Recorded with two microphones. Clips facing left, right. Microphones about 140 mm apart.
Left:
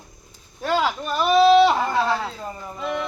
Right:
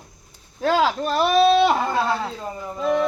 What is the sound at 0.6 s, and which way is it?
Speech, 90° right.